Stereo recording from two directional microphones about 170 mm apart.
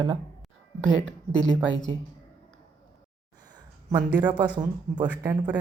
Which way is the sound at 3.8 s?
25° right (ahead or behind).